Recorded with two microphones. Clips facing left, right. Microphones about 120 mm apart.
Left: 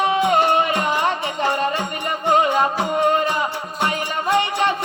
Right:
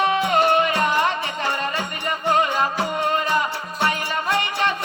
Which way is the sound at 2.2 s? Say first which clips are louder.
Left 3 dB; 30° left (ahead or behind).